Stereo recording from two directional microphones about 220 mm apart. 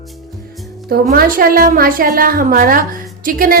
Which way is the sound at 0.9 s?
40° right (ahead or behind).